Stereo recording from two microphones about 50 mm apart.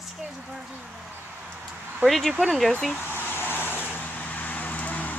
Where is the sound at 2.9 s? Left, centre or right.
Left.